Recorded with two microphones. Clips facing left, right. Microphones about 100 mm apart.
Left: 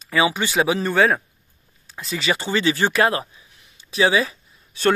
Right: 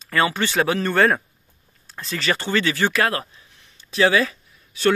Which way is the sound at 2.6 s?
25° left (ahead or behind).